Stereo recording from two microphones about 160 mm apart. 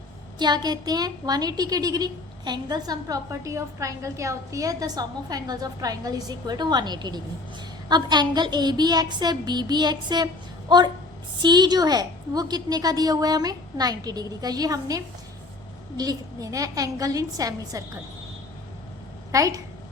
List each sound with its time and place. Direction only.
0.3 s a woman's voice: 25° right (ahead or behind)
19.3 s a woman's voice: 20° right (ahead or behind)